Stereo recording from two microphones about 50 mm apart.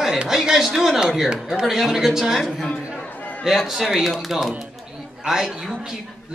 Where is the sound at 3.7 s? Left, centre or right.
Centre.